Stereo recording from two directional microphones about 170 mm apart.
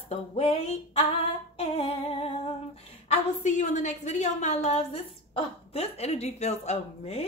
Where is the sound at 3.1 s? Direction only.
45° left (ahead or behind).